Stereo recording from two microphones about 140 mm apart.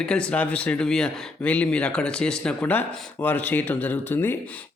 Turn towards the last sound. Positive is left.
turn(degrees=15)  # may be behind; listen again after turning